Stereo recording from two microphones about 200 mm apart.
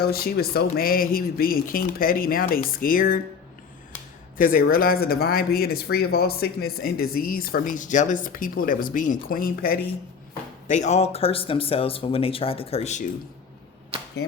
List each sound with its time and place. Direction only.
0.0 s speech: 50° left (ahead or behind)
4.4 s speech: 45° left (ahead or behind)
10.7 s speech: 35° left (ahead or behind)
13.9 s arrow: 30° right (ahead or behind)